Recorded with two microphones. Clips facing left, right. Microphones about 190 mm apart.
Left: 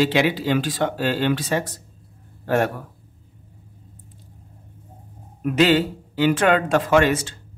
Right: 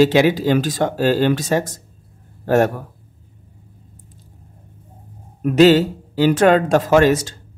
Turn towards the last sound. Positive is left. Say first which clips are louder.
# right 4 dB
turn(degrees=-40)  # may be behind; listen again after turning